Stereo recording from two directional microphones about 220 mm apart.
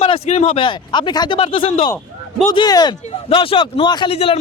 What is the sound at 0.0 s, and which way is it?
Speech, 25° left (ahead or behind).